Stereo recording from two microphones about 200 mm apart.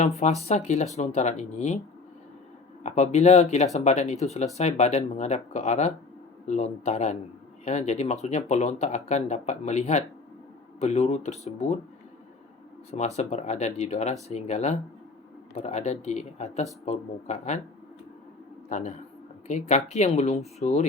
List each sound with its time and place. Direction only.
0.4 s speech: 35° left (ahead or behind)
2.8 s speech: 35° left (ahead or behind)
12.9 s speech: 35° left (ahead or behind)
18.7 s speech: 35° left (ahead or behind)